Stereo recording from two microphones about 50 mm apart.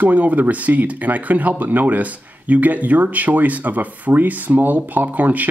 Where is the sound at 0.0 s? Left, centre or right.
Right.